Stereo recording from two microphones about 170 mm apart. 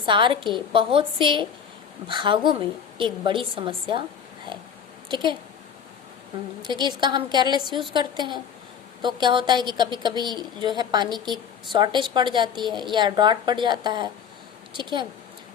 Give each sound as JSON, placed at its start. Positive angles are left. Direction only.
{"t": 0.0, "sound": "a woman's voice", "side_deg": -30}
{"t": 5.0, "sound": "speech", "side_deg": -25}
{"t": 6.6, "sound": "a woman's voice", "side_deg": -25}